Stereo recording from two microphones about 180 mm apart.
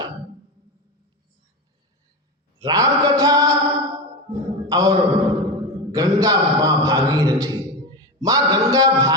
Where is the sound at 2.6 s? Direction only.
20° right (ahead or behind).